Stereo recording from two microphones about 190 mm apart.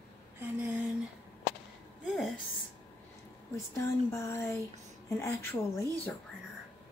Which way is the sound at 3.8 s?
15° left (ahead or behind).